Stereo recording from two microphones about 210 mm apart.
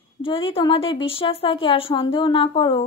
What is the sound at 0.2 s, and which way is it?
Speech, 25° left (ahead or behind).